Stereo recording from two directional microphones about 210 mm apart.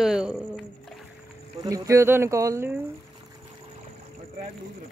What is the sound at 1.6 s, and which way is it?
Speech, 15° right (ahead or behind).